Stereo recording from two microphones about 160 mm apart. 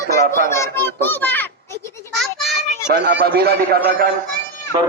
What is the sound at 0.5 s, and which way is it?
Children playing, 15° left (ahead or behind).